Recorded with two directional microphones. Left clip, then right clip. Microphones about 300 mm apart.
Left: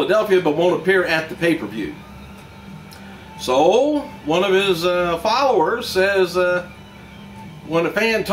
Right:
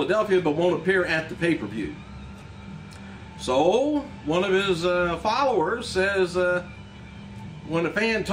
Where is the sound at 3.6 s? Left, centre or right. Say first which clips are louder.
Left 6 dB; centre.